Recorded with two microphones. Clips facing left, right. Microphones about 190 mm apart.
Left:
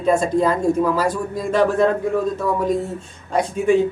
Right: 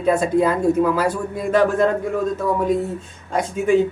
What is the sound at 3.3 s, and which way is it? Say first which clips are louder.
Speech: left 2 dB; centre (ahead or behind).